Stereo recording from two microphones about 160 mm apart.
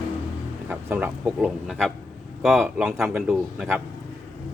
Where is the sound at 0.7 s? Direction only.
10° right (ahead or behind).